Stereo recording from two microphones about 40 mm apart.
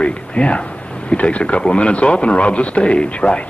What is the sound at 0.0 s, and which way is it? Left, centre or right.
A man's voice, left.